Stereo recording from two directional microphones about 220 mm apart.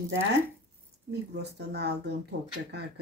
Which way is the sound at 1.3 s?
50° right (ahead or behind).